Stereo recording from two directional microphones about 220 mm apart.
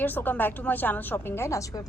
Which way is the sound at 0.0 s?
10° left (ahead or behind).